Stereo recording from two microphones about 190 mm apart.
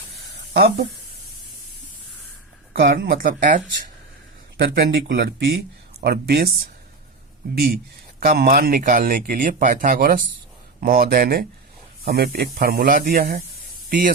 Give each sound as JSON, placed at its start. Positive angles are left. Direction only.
{"t": 0.5, "sound": "speech", "side_deg": -60}
{"t": 2.7, "sound": "speech", "side_deg": -55}
{"t": 4.5, "sound": "speech", "side_deg": -60}